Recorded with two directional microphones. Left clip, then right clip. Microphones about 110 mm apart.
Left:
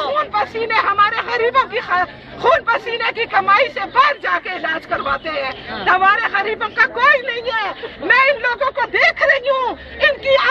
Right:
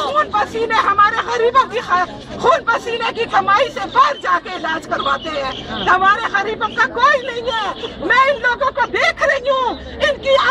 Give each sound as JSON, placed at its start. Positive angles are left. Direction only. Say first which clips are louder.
{"t": 0.1, "sound": "a sound", "louder": "right 2 dB", "side_deg": 5}
{"t": 0.9, "sound": "speech", "louder": "right 2 dB", "side_deg": 5}
{"t": 3.3, "sound": "speech", "louder": "even", "side_deg": 10}
{"t": 8.7, "sound": "speech", "louder": "left 1 dB", "side_deg": 20}